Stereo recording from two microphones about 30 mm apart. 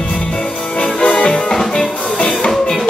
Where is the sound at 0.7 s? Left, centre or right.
Left.